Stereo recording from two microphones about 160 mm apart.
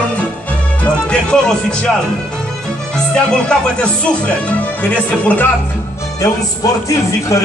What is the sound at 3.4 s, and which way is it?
Speech, 5° left (ahead or behind).